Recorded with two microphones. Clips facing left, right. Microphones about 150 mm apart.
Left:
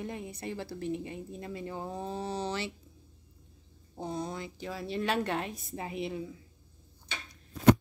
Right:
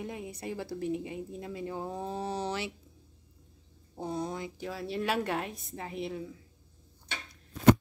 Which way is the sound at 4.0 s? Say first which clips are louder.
Right 1 dB; 10° right (ahead or behind).